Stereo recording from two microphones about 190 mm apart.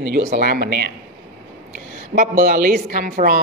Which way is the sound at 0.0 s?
55° right (ahead or behind).